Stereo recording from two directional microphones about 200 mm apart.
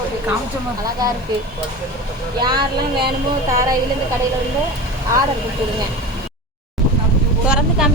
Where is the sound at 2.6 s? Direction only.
25° right (ahead or behind).